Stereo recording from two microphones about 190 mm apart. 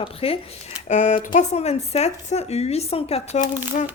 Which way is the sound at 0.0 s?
30° left (ahead or behind).